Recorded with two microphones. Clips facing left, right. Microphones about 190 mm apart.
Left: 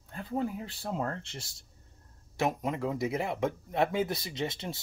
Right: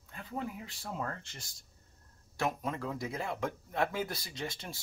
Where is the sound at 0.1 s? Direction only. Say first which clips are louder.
Left 7 dB; 35° left (ahead or behind).